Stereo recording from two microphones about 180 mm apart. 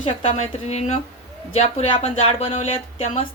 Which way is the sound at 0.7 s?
40° left (ahead or behind).